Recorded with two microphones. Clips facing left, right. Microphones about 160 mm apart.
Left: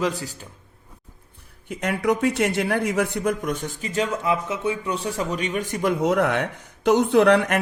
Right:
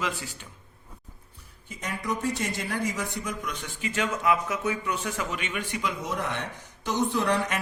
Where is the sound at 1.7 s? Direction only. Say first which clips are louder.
Left 10 dB; 65° left (ahead or behind).